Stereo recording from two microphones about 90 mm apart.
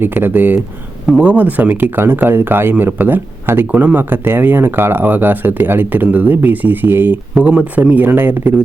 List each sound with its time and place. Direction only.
0.0 s speech: 25° right (ahead or behind)